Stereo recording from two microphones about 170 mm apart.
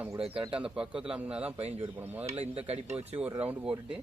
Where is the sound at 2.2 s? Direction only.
40° right (ahead or behind).